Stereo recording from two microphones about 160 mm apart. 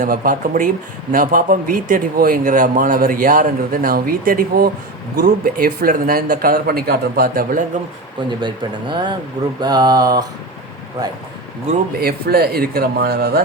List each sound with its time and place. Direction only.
0.0 s a man's voice: 55° right (ahead or behind)
8.4 s speech: 30° right (ahead or behind)
11.9 s a man's voice: 75° right (ahead or behind)